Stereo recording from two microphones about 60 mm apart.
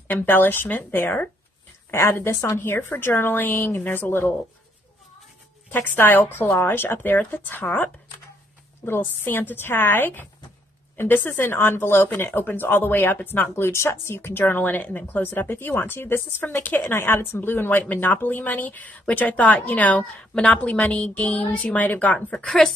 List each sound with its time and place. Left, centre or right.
0.1 s speech: left
1.9 s speech: left
5.7 s speech: left
9.0 s speech: left
13.7 s speech: left
22.3 s speech: centre